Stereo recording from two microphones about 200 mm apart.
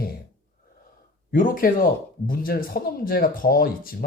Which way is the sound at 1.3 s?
45° left (ahead or behind).